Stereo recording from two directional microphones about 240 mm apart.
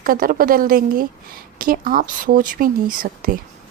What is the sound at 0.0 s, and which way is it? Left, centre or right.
Speech, right.